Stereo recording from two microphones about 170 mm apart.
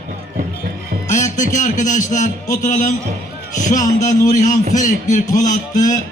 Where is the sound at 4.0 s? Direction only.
45° left (ahead or behind).